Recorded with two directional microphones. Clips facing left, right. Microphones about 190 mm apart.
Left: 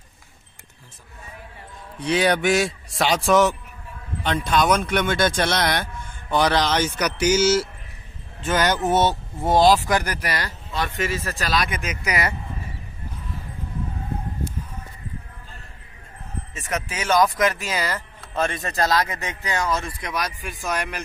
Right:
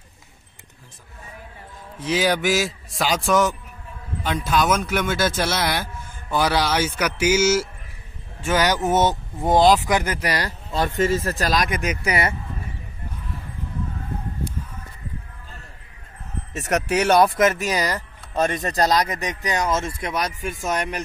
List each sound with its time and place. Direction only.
2.0 s speech: 5° right (ahead or behind); by 10.9 s 25° right (ahead or behind)
11.3 s speech: 35° right (ahead or behind)
16.5 s speech: 70° right (ahead or behind)
17.4 s a man's voice: 20° right (ahead or behind)